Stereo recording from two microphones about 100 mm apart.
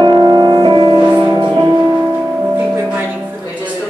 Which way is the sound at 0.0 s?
50° right (ahead or behind).